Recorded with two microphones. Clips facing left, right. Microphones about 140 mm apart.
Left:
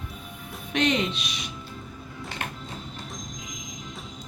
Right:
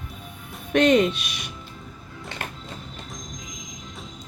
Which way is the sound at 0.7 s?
50° right (ahead or behind).